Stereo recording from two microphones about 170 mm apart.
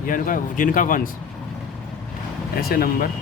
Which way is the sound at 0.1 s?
50° left (ahead or behind).